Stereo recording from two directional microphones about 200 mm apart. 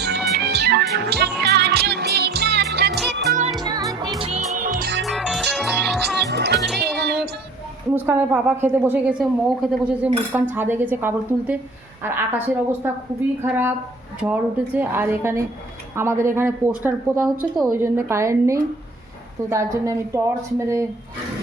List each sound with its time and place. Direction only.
0.0 s music: 55° right (ahead or behind)
3.6 s music: 20° right (ahead or behind)
4.2 s music: 30° right (ahead or behind)
5.0 s music: centre (ahead or behind)
6.2 s music: 55° right (ahead or behind)
7.9 s speech: 10° right (ahead or behind)